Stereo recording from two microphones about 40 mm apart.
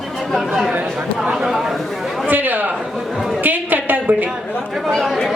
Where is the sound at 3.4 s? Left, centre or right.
Right.